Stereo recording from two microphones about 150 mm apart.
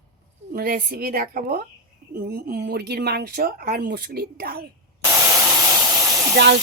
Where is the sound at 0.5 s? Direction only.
80° right.